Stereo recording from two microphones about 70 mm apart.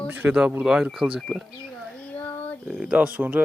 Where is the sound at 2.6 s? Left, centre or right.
Centre.